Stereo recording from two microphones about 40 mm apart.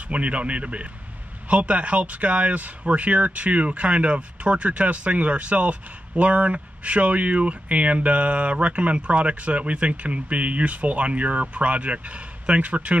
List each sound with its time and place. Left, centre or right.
0.1 s speech: right